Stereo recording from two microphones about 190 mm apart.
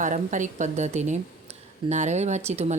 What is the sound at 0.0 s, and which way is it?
A woman's voice, 40° right (ahead or behind).